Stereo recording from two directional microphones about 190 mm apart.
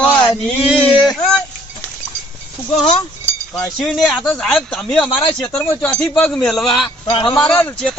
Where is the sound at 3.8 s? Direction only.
Centre (ahead or behind).